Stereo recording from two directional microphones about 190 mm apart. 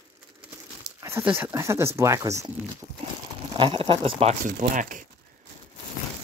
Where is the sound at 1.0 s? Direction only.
10° right (ahead or behind).